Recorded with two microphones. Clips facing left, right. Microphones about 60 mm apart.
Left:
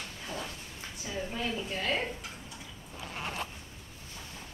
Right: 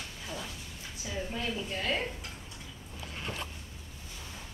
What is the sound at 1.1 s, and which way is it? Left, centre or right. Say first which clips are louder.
A woman's voice: left 1 dB; centre.